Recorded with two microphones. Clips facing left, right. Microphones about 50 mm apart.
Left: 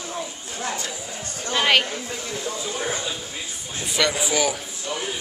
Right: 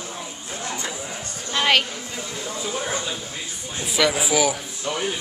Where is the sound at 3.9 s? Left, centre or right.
Centre.